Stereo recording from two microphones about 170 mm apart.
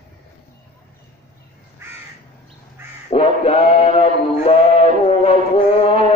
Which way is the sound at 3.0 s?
35° left (ahead or behind).